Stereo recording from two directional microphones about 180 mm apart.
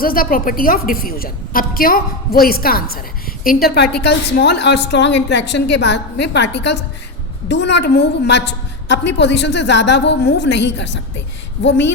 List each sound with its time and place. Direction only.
0.0 s a woman's voice: 55° left (ahead or behind); by 11.9 s 85° left